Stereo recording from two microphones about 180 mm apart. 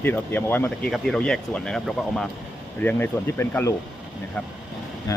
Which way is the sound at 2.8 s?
10° left (ahead or behind).